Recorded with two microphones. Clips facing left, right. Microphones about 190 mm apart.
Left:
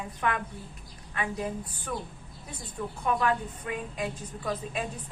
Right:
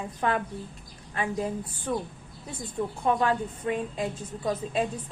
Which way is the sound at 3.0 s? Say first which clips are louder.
Right 2 dB; 30° right (ahead or behind).